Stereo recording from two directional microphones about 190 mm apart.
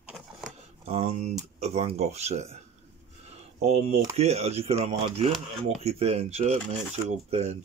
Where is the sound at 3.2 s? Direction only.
35° right (ahead or behind).